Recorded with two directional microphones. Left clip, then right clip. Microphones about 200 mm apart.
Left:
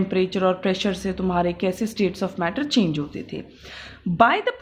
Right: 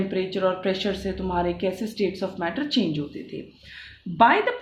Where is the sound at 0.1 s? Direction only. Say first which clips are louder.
Left 4 dB; 50° left (ahead or behind).